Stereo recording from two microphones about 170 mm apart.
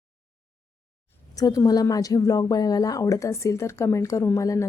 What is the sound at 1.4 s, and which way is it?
Speech, 20° left (ahead or behind).